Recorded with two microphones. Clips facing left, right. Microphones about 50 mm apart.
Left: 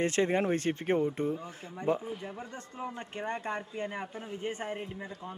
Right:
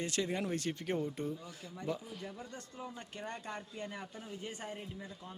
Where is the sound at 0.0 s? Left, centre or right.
Left.